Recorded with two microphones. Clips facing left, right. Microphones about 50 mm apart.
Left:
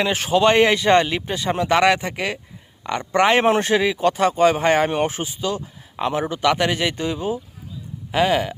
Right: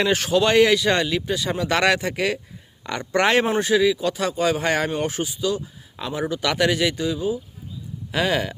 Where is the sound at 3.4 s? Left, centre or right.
Left.